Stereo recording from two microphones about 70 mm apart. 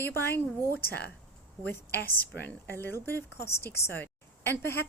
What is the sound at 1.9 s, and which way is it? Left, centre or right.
A woman's voice, left.